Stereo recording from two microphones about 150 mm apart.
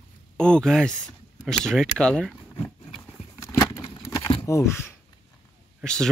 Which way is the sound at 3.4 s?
20° left (ahead or behind).